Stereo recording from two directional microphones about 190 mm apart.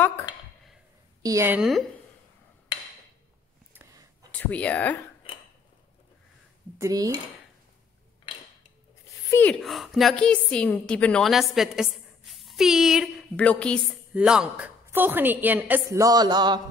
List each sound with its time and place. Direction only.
1.2 s a woman's voice: 15° right (ahead or behind)
1.6 s a woman's voice: centre (ahead or behind)
4.3 s speech: 5° left (ahead or behind)
6.8 s dishes: 20° right (ahead or behind)
9.3 s a woman's voice: 5° left (ahead or behind); by 16.6 s 20° right (ahead or behind)